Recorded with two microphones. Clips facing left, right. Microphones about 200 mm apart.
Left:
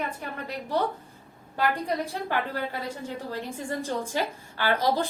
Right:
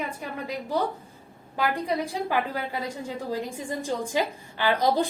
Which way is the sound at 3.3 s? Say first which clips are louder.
Right 3 dB; 15° right (ahead or behind).